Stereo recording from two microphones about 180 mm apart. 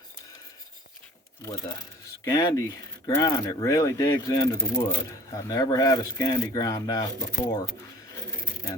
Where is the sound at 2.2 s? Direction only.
20° left (ahead or behind).